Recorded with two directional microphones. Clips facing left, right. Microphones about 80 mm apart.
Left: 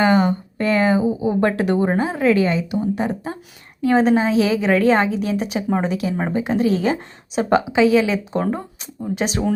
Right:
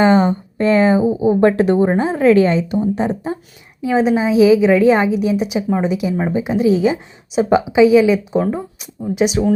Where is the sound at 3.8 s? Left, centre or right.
Centre.